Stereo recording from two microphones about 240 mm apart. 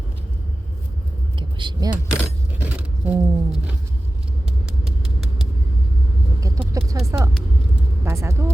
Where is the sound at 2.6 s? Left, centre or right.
Centre.